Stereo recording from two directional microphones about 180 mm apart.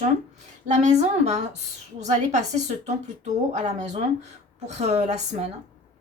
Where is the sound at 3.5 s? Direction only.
40° right (ahead or behind).